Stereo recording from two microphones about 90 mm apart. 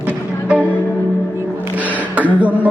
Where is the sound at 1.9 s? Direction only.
15° right (ahead or behind).